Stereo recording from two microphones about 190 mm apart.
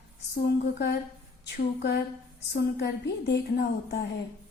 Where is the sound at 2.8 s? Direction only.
65° left (ahead or behind).